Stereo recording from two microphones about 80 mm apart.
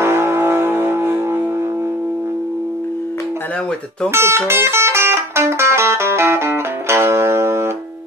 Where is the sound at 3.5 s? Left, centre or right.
Centre.